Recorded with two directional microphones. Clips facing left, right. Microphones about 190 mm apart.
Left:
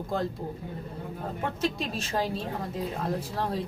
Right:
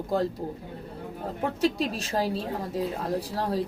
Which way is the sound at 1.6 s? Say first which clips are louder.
Right 6 dB; 40° right (ahead or behind).